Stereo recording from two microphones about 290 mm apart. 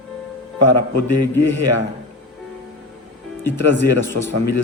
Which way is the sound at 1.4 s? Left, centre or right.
Right.